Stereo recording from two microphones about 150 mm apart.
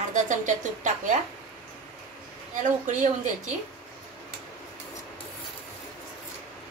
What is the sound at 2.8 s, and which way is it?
Speech, 60° right (ahead or behind).